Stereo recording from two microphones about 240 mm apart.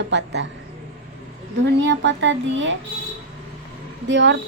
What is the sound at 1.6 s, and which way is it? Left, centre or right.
A woman's voice, right.